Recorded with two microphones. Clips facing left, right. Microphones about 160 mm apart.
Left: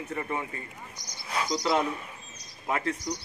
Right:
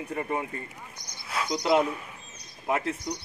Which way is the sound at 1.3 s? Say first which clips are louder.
Left 1 dB; 5° right (ahead or behind).